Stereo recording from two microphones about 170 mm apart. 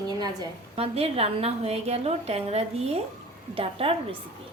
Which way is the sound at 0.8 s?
35° right (ahead or behind).